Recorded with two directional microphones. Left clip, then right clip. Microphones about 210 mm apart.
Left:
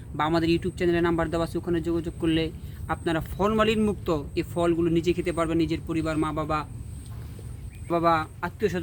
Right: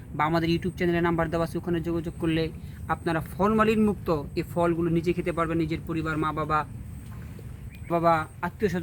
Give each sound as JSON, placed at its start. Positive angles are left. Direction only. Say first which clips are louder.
{"t": 0.2, "sound": "speech", "louder": "left 1 dB", "side_deg": 5}
{"t": 6.3, "sound": "a man's voice", "louder": "right 1 dB", "side_deg": 50}
{"t": 7.9, "sound": "speech", "louder": "even", "side_deg": 0}